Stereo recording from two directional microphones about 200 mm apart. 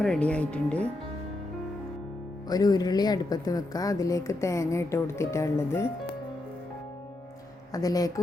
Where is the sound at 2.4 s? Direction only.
20° left (ahead or behind).